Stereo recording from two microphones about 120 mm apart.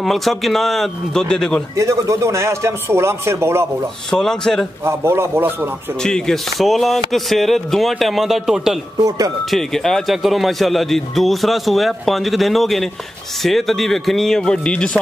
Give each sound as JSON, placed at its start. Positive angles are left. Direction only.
{"t": 0.0, "sound": "a man's voice", "side_deg": 0}
{"t": 1.8, "sound": "speech", "side_deg": -25}
{"t": 4.1, "sound": "a man's voice", "side_deg": 5}
{"t": 4.8, "sound": "speech", "side_deg": -20}
{"t": 6.0, "sound": "a man's voice", "side_deg": 5}
{"t": 8.9, "sound": "speech", "side_deg": -30}
{"t": 9.5, "sound": "a man's voice", "side_deg": 5}